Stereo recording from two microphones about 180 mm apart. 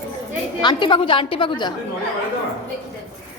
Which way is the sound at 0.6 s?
25° left (ahead or behind).